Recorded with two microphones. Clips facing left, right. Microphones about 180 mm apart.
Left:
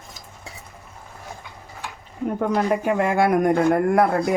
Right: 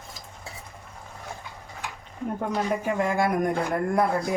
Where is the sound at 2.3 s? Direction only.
65° left (ahead or behind).